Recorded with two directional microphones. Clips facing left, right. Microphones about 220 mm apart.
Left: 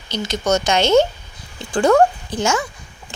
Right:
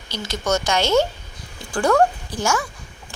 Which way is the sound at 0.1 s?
20° left (ahead or behind).